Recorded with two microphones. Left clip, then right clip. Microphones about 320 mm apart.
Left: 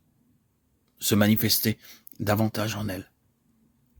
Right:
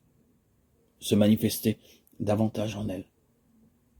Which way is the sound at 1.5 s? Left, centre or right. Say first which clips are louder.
Left 3 dB; left.